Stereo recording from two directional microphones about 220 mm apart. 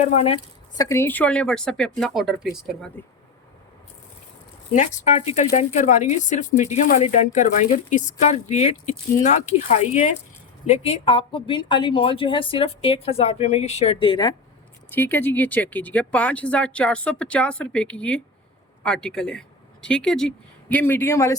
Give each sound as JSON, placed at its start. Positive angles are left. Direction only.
{"t": 0.1, "sound": "a woman's voice", "side_deg": 30}
{"t": 0.8, "sound": "speech", "side_deg": 15}
{"t": 3.0, "sound": "speech", "side_deg": 10}
{"t": 4.7, "sound": "a woman's voice", "side_deg": 35}
{"t": 14.8, "sound": "speech", "side_deg": 10}